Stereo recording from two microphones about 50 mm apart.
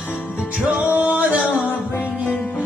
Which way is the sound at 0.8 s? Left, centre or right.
Right.